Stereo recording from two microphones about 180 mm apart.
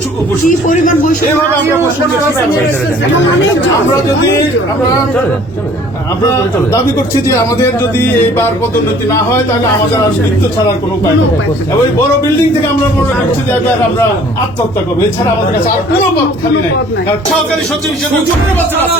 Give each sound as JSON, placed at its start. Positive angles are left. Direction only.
{"t": 0.4, "sound": "speech", "side_deg": 45}
{"t": 7.6, "sound": "music", "side_deg": 10}